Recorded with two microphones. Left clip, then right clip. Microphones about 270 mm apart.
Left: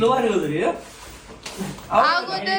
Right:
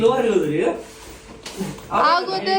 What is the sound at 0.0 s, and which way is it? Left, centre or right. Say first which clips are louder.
Speech: right 2 dB; centre.